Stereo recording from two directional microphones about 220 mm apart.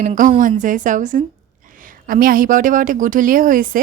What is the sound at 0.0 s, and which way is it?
A woman's voice, 35° right (ahead or behind).